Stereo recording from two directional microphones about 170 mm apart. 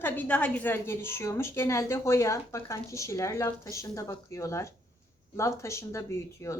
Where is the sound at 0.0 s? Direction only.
10° left (ahead or behind).